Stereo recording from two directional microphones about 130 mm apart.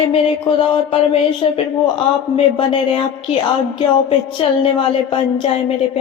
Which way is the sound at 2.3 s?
45° left (ahead or behind).